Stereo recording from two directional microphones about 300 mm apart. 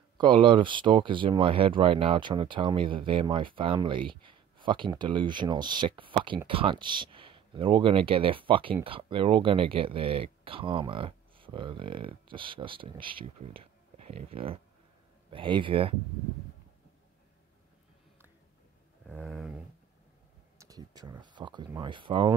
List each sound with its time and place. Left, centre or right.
0.2 s speech: centre
19.0 s a sound: centre
20.5 s speech: centre